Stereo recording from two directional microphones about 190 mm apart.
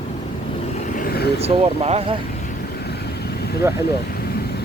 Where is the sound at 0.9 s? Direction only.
50° left (ahead or behind).